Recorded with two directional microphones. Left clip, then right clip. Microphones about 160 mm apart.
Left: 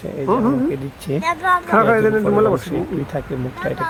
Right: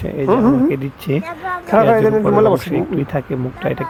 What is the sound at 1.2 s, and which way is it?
Speech, 25° left (ahead or behind).